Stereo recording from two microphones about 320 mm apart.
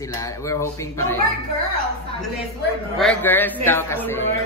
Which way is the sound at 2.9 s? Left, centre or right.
Centre.